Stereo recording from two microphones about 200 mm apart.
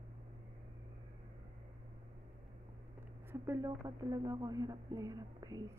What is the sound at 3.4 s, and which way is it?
Speech, 15° right (ahead or behind).